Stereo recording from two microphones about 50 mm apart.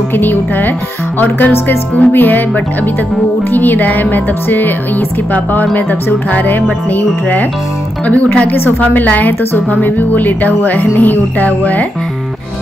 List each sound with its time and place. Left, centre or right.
0.1 s speech: left